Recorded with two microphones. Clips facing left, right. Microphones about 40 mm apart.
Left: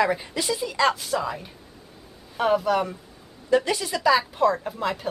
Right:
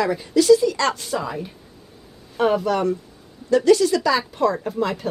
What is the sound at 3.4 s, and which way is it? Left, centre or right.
Speech, centre.